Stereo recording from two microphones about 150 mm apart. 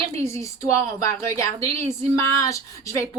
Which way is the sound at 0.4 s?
20° left (ahead or behind).